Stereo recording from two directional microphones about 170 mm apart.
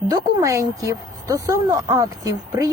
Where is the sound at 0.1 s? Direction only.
20° right (ahead or behind).